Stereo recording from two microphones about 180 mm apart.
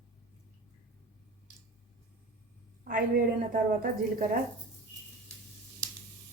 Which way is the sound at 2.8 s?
55° right (ahead or behind).